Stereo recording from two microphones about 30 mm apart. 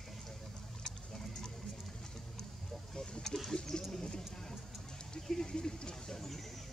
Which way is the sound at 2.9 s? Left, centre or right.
Left.